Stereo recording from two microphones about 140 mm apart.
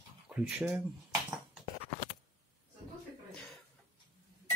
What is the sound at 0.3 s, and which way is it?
Speech, 10° right (ahead or behind).